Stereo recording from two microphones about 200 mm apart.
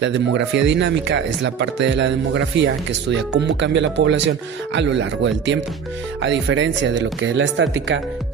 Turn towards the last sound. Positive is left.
turn(degrees=-65)  # may be behind; listen again after turning